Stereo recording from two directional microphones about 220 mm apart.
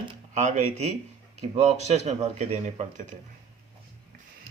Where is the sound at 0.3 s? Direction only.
35° right (ahead or behind).